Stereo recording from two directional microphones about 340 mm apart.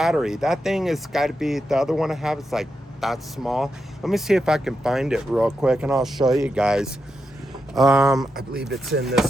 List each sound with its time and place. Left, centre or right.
0.0 s speech: centre
8.7 s speech: right